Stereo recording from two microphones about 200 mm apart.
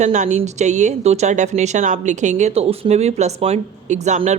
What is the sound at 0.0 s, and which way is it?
A woman's voice, 35° right (ahead or behind).